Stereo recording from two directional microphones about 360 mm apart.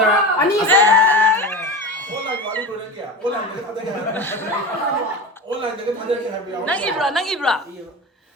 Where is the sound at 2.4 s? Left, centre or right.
Centre.